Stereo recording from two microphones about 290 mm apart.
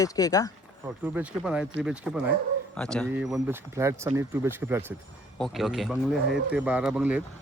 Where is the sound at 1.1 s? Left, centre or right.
Centre.